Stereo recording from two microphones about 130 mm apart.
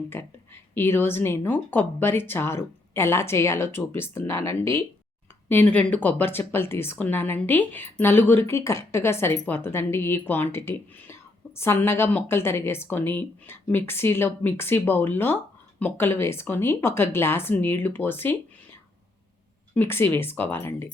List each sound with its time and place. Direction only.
0.1 s a woman's voice: 15° left (ahead or behind)
19.7 s a woman's voice: 15° left (ahead or behind)